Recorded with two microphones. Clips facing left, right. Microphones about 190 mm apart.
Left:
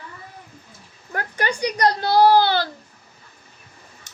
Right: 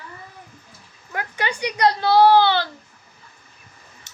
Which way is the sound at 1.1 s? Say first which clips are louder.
Left 2 dB; 40° left (ahead or behind).